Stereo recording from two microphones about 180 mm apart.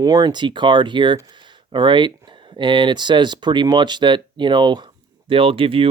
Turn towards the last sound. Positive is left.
turn(degrees=-30)  # may be behind; listen again after turning